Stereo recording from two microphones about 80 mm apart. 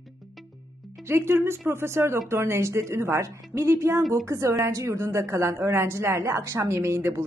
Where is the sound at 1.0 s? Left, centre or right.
Right.